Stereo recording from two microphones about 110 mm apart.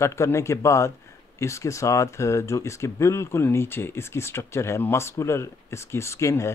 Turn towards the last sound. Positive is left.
turn(degrees=25)  # may be behind; listen again after turning